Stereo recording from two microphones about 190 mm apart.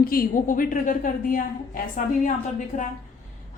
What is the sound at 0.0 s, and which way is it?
A woman's voice, 50° left (ahead or behind).